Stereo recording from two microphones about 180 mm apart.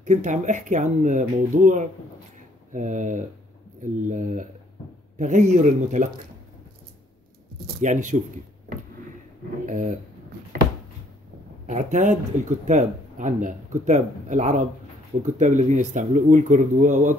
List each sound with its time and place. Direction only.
0.0 s speech: 40° right (ahead or behind)
7.5 s a sound: 50° right (ahead or behind)
9.7 s speech: 45° right (ahead or behind)
11.6 s speech: 40° right (ahead or behind)